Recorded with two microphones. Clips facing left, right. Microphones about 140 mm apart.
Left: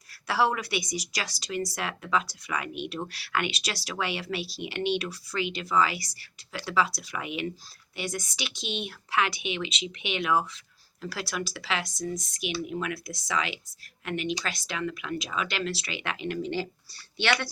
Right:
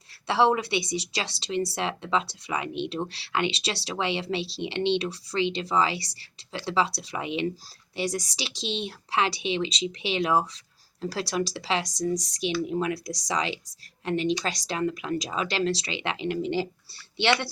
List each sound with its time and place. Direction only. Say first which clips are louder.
0.3 s speech: right 4 dB; 25° right (ahead or behind)